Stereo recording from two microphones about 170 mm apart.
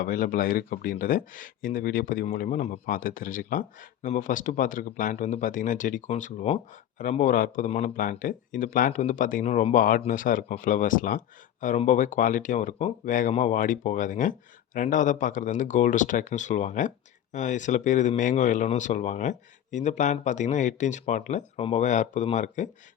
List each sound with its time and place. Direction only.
0.0 s speech: 55° left (ahead or behind)